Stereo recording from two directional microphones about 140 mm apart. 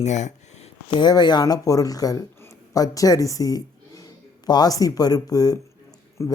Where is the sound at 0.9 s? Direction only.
30° left (ahead or behind).